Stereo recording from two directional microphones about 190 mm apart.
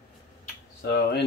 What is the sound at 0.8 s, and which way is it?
Speech, 60° left (ahead or behind).